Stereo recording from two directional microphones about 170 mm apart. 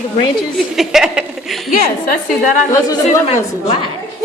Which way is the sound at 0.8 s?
5° right (ahead or behind).